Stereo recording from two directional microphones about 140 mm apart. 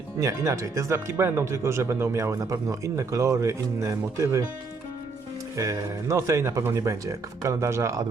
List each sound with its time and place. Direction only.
0.2 s speech: 20° right (ahead or behind)
5.5 s speech: 25° right (ahead or behind)